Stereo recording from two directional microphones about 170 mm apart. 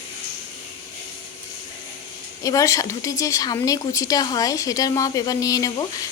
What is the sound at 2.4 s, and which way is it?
A woman's voice, 20° left (ahead or behind).